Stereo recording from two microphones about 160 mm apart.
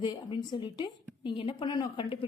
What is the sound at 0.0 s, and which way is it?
A woman's voice, 30° left (ahead or behind).